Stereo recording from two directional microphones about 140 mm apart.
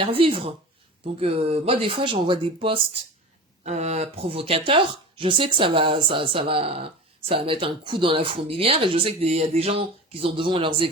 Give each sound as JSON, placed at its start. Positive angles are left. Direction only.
{"t": 0.0, "sound": "speech", "side_deg": -40}
{"t": 3.6, "sound": "speech", "side_deg": -55}